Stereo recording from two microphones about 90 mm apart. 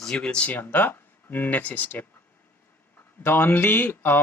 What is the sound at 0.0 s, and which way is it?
Speech, 10° left (ahead or behind).